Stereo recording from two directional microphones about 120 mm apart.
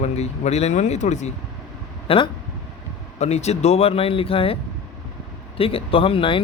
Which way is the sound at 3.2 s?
65° left (ahead or behind).